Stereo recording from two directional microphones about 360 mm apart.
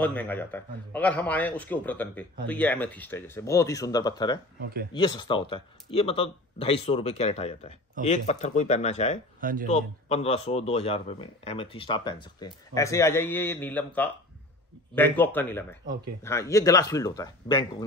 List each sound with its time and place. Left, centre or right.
0.0 s a man's voice: centre
9.4 s speech: right
9.7 s a man's voice: centre